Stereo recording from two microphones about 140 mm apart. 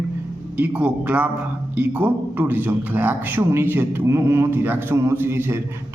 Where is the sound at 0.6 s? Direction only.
10° right (ahead or behind).